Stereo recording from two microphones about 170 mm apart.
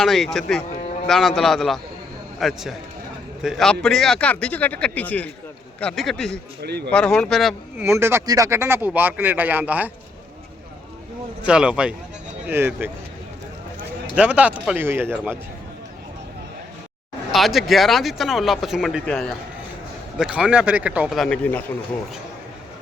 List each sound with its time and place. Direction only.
0.0 s speech: centre (ahead or behind)
6.6 s speech: 75° right (ahead or behind)
6.9 s speech: 5° left (ahead or behind)
7.9 s speech: 15° right (ahead or behind)
11.4 s speech: 5° right (ahead or behind)
14.2 s speech: 5° right (ahead or behind)
17.3 s speech: centre (ahead or behind)